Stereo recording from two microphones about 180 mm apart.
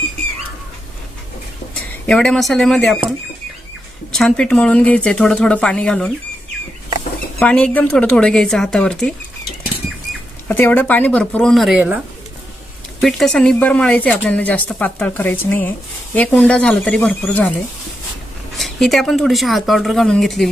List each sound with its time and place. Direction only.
1.7 s speech: 5° left (ahead or behind)
4.1 s speech: centre (ahead or behind)
7.3 s speech: 5° left (ahead or behind)
10.5 s speech: 10° left (ahead or behind)
13.0 s speech: centre (ahead or behind)
18.5 s speech: centre (ahead or behind)